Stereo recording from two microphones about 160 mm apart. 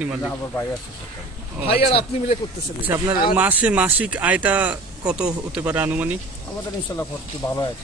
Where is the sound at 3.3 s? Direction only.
10° right (ahead or behind).